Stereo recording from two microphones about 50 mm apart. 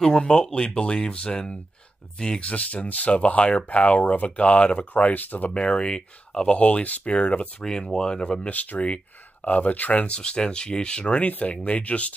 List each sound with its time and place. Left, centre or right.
0.0 s speech: centre
2.5 s speech: left
5.5 s speech: centre
8.5 s speech: left